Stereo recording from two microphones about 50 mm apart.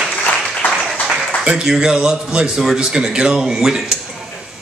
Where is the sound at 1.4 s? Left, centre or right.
Centre.